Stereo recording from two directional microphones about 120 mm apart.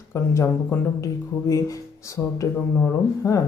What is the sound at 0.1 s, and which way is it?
Speech, 20° left (ahead or behind).